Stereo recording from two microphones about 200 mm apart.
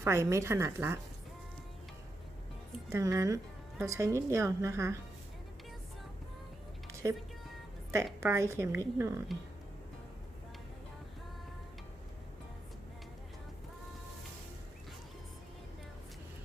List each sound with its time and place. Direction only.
0.0 s a woman's voice: 15° right (ahead or behind)
2.9 s a woman's voice: 15° right (ahead or behind)
6.9 s music: 15° right (ahead or behind)
8.2 s a woman's voice: 15° right (ahead or behind)